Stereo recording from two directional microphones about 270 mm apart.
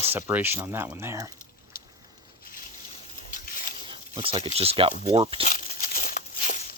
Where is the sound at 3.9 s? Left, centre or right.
Centre.